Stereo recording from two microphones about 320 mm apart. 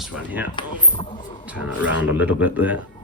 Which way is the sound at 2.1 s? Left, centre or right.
Centre.